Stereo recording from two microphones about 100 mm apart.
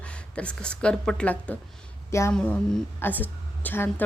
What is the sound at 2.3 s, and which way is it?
A woman's voice, 15° left (ahead or behind).